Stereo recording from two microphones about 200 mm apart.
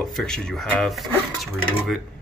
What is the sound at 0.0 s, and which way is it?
Speech, centre (ahead or behind).